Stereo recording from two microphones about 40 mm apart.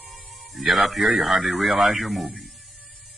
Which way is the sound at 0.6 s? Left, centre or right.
Centre.